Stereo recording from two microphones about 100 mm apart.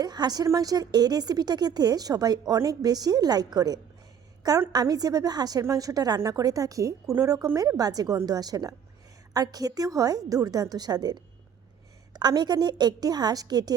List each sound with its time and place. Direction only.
0.0 s a woman's voice: 45° right (ahead or behind)